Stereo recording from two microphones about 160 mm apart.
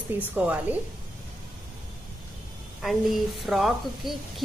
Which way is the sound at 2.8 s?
Centre (ahead or behind).